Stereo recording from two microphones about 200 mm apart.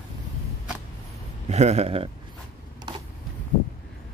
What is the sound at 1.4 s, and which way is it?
Speech, 35° right (ahead or behind).